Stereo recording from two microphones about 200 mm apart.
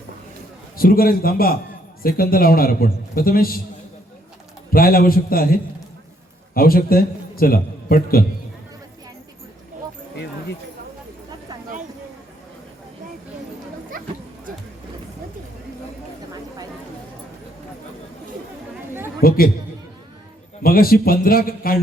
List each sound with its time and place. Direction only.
0.8 s a man's voice: 45° left (ahead or behind)
4.7 s a man's voice: 45° left (ahead or behind)
13.9 s a sound: 45° right (ahead or behind)
19.2 s chatter: 45° left (ahead or behind)
20.6 s a man's voice: 45° left (ahead or behind)